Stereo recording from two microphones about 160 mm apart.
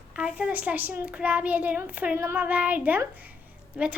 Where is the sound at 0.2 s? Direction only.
5° right (ahead or behind).